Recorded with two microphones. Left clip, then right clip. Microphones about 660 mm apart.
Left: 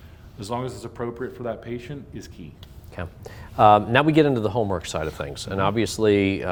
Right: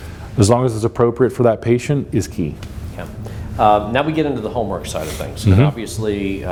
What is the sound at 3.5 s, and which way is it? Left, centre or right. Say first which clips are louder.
Speech: right 2 dB; left.